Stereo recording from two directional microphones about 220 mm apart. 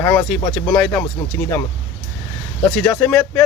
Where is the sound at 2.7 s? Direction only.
5° left (ahead or behind).